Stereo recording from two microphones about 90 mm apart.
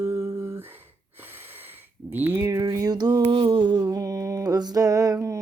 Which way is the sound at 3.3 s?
65° right (ahead or behind).